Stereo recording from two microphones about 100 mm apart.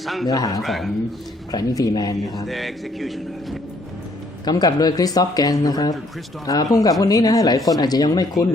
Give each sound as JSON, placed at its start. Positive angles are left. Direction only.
{"t": 0.0, "sound": "speech", "side_deg": 0}
{"t": 0.3, "sound": "speech", "side_deg": 40}
{"t": 0.6, "sound": "speech", "side_deg": 0}
{"t": 1.5, "sound": "speech", "side_deg": 35}
{"t": 2.5, "sound": "speech", "side_deg": 0}
{"t": 4.4, "sound": "speech", "side_deg": 40}